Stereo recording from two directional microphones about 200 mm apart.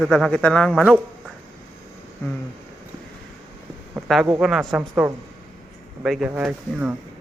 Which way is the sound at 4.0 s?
5° right (ahead or behind).